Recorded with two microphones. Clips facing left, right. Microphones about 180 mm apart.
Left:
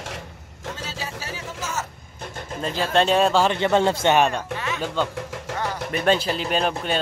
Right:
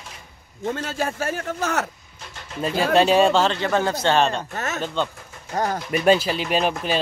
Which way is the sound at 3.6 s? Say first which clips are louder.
Left 3 dB; 20° left (ahead or behind).